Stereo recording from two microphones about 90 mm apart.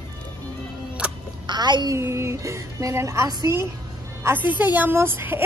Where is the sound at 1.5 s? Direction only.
55° right (ahead or behind).